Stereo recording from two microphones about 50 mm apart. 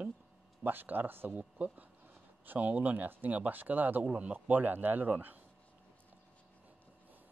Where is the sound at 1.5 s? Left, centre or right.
Right.